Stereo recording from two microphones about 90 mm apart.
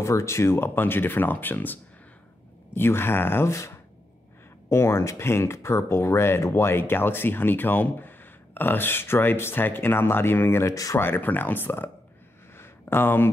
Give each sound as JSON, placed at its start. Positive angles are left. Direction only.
{"t": 0.0, "sound": "speech", "side_deg": 35}
{"t": 10.7, "sound": "speech", "side_deg": 40}
{"t": 11.0, "sound": "speech", "side_deg": 25}
{"t": 12.5, "sound": "a sound", "side_deg": 25}